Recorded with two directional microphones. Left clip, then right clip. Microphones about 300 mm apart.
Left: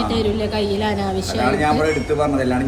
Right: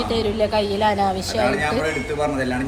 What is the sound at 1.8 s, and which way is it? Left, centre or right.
Speech, centre.